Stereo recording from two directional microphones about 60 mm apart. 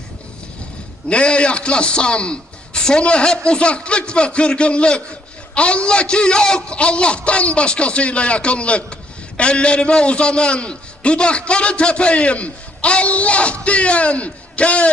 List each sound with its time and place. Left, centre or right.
1.0 s a man's voice: centre